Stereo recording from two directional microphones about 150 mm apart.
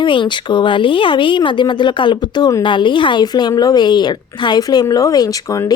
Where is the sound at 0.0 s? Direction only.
30° left (ahead or behind).